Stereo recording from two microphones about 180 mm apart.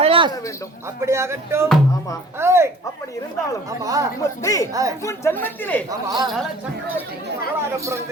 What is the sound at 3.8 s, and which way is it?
Speech, 20° right (ahead or behind).